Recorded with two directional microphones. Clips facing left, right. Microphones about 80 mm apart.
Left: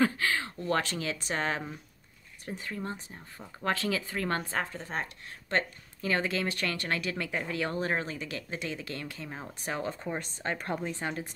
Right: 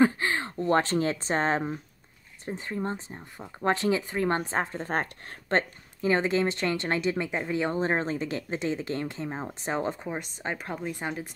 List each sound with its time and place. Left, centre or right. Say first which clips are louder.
0.0 s speech: right 4 dB; right
4.7 s speech: right 6 dB; right
5.6 s speech: right 4 dB; right
9.9 s speech: right 1 dB; centre